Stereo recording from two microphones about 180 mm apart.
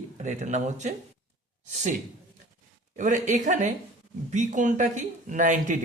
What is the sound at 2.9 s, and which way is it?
Speech, 45° right (ahead or behind).